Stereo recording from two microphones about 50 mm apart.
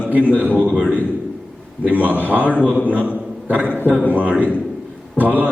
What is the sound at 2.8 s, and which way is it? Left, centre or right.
Speech, right.